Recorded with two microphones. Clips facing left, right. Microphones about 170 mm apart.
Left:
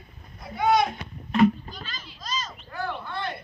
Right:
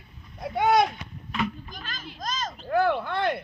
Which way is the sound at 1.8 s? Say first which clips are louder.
Right 9 dB; 50° right (ahead or behind).